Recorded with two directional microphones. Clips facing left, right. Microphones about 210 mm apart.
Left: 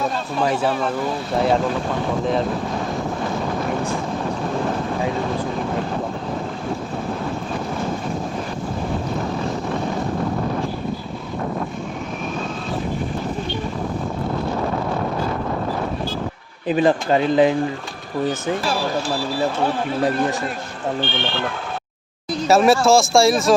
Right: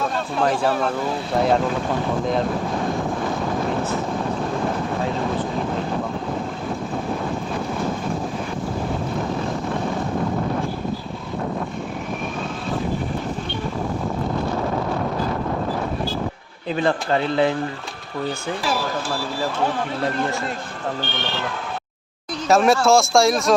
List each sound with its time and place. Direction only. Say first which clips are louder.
0.3 s speech: even; 5° left (ahead or behind)
16.6 s speech: left 4 dB; 15° left (ahead or behind)
20.0 s speech: left 5 dB; 15° left (ahead or behind)
21.0 s speech: left 3 dB; 40° right (ahead or behind)
22.4 s speech: left 1 dB; 5° left (ahead or behind)